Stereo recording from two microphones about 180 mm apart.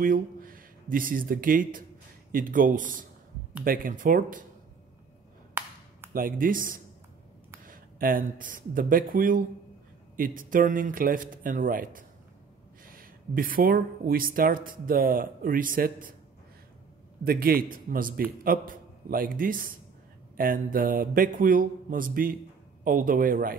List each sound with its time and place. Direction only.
0.0 s speech: 50° right (ahead or behind)
6.1 s speech: 50° right (ahead or behind)
17.2 s a man's voice: 55° right (ahead or behind)